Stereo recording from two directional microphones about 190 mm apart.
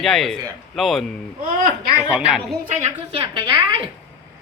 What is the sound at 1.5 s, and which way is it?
Speech, 45° right (ahead or behind).